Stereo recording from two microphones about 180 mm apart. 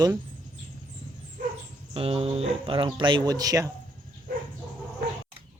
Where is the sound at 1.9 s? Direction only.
30° right (ahead or behind).